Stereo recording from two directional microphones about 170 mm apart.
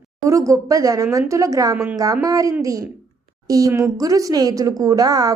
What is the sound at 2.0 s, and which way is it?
Speech, 20° right (ahead or behind).